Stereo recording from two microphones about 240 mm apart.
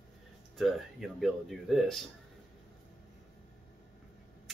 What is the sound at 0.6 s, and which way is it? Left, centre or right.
Speech, centre.